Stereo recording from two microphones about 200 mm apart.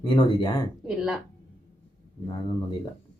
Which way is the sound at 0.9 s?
Centre (ahead or behind).